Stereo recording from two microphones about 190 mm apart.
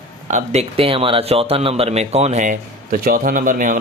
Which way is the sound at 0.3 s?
35° right (ahead or behind).